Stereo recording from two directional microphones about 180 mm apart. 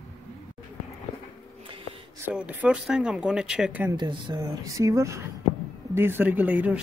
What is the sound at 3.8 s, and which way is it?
Speech, 25° right (ahead or behind).